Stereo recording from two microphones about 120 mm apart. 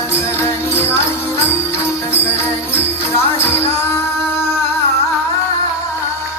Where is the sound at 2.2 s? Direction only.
20° left (ahead or behind).